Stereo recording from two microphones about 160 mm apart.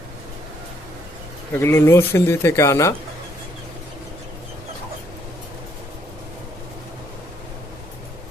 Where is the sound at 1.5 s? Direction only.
15° left (ahead or behind).